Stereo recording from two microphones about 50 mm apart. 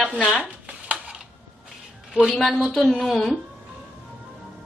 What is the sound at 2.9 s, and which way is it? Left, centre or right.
Speech, centre.